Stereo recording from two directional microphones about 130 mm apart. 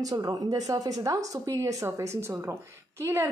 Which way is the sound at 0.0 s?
30° right (ahead or behind).